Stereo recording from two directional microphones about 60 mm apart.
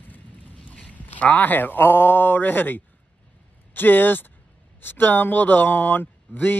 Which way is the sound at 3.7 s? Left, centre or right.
Left.